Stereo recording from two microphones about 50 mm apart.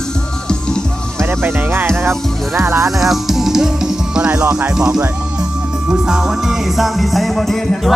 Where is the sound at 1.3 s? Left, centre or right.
Right.